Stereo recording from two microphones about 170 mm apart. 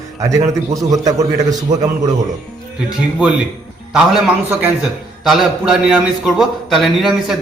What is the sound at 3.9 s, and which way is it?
A man's voice, 5° right (ahead or behind).